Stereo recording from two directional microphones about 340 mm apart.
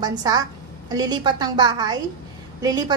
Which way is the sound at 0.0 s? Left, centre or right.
Centre.